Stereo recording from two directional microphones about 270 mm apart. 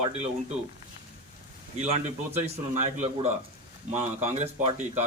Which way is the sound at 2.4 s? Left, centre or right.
Right.